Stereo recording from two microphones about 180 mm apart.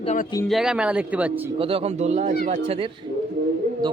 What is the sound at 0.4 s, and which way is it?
Speech, centre (ahead or behind).